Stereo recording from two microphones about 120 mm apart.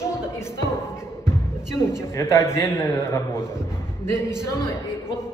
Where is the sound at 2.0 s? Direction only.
25° left (ahead or behind).